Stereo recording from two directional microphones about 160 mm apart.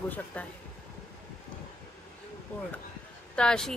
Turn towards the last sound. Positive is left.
turn(degrees=5)  # may be behind; listen again after turning